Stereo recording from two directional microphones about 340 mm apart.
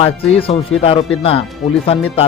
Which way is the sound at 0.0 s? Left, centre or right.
Centre.